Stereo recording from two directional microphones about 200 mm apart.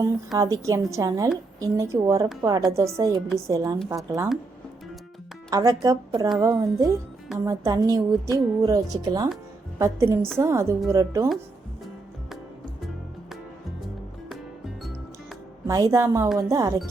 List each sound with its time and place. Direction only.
0.3 s a woman's voice: 15° right (ahead or behind)
5.5 s a woman's voice: 20° right (ahead or behind)
15.6 s a woman's voice: 15° right (ahead or behind)